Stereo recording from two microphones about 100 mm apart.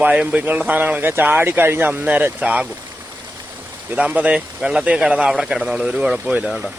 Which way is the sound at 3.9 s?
15° right (ahead or behind).